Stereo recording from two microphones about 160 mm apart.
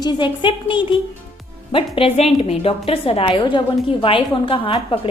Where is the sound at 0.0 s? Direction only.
30° left (ahead or behind).